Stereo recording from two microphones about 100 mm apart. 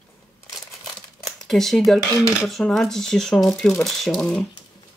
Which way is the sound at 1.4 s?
5° left (ahead or behind).